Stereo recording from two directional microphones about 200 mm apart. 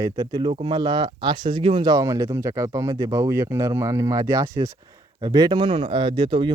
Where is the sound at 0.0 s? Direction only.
20° right (ahead or behind).